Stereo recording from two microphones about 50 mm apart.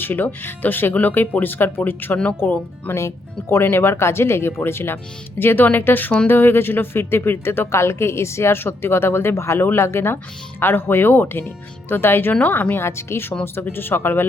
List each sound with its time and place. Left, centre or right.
0.0 s speech: left
2.9 s a woman's voice: left
7.8 s a woman's voice: left
12.8 s a woman's voice: left